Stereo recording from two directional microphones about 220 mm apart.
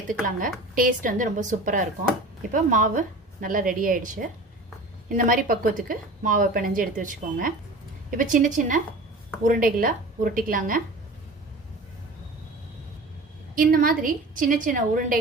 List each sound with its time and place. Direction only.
0.1 s a woman's voice: 40° right (ahead or behind)
13.6 s a woman's voice: 40° right (ahead or behind)